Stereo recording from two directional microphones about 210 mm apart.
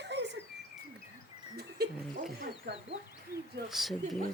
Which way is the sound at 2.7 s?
50° right (ahead or behind).